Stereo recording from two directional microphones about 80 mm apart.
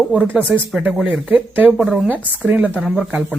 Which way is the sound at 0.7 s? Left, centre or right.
Centre.